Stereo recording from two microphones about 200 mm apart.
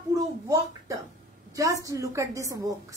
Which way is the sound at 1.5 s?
15° right (ahead or behind).